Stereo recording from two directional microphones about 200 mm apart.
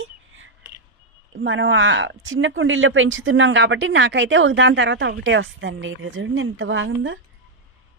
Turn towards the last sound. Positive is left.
turn(degrees=-70)  # may be behind; listen again after turning